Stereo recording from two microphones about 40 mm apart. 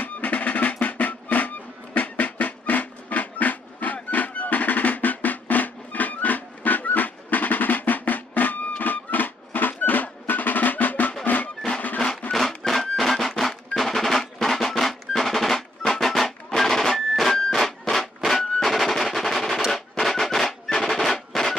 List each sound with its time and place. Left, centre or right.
0.0 s music: left
12.3 s music: centre